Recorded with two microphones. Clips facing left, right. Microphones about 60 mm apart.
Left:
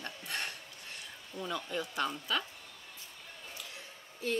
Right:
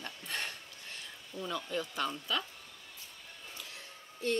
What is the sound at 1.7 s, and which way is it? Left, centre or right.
Speech, centre.